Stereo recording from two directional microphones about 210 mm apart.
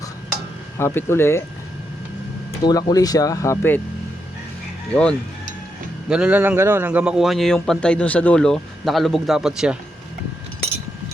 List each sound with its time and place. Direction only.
0.8 s speech: 10° left (ahead or behind)
2.6 s speech: 20° left (ahead or behind)
4.9 s a man's voice: 5° left (ahead or behind)
6.1 s a man's voice: 5° right (ahead or behind)